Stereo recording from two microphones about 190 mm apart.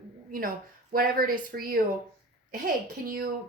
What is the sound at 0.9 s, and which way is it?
Speech, 50° right (ahead or behind).